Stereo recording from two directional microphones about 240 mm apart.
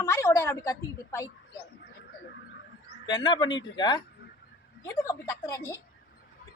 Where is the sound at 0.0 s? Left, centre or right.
Centre.